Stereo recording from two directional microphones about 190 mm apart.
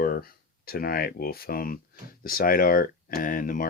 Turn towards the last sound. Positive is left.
turn(degrees=45)  # may be behind; listen again after turning